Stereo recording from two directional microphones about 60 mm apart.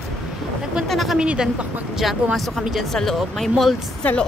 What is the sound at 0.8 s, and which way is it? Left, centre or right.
Speech, centre.